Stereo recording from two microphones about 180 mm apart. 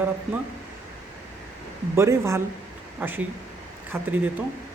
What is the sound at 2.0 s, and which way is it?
Speech, 15° right (ahead or behind).